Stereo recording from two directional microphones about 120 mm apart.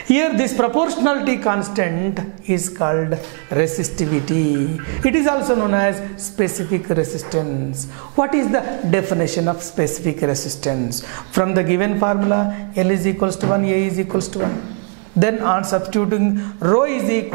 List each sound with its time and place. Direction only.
0.1 s speech: 10° right (ahead or behind)
5.0 s speech: 10° right (ahead or behind)